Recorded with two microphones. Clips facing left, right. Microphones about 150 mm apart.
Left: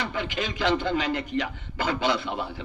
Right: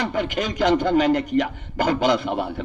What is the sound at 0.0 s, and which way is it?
A man's voice, 45° right (ahead or behind).